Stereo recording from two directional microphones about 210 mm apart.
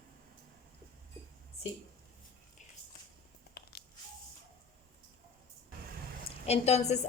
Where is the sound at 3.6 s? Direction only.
50° left (ahead or behind).